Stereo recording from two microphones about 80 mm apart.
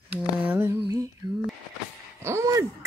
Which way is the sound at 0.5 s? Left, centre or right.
Right.